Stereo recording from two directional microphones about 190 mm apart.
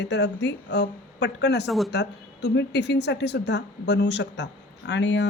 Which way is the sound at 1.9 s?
65° left (ahead or behind).